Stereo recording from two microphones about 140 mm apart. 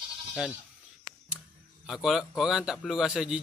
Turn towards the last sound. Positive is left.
turn(degrees=-5)  # may be behind; listen again after turning